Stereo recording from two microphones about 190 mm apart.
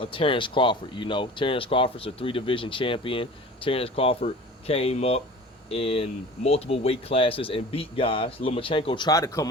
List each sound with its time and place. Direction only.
0.0 s speech: 25° left (ahead or behind)